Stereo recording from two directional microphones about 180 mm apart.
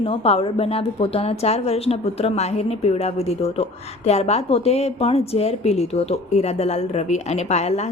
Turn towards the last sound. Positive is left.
turn(degrees=40)  # may be behind; listen again after turning